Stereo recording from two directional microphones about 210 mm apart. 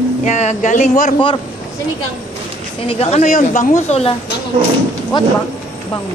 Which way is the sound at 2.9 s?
30° left (ahead or behind).